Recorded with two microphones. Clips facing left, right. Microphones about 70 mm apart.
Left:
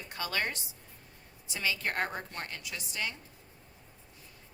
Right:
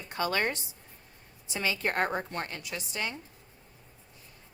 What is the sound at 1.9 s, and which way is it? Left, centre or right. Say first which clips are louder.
Speech: right 5 dB; right.